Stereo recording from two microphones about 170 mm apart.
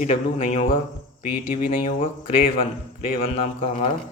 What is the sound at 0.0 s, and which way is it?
Speech, 45° left (ahead or behind).